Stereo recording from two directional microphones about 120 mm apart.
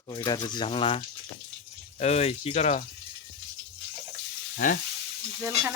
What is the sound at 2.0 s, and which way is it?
Speech, 65° left (ahead or behind).